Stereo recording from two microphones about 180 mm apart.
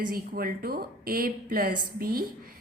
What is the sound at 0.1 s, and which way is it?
A woman's voice, 55° right (ahead or behind).